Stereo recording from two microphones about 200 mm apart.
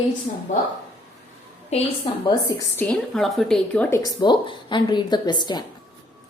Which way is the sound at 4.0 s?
20° left (ahead or behind).